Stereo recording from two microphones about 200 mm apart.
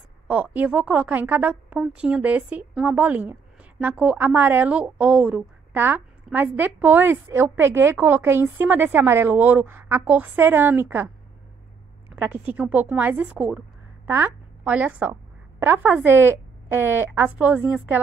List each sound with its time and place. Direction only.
0.3 s a woman's voice: 5° right (ahead or behind)
12.2 s a woman's voice: 10° right (ahead or behind)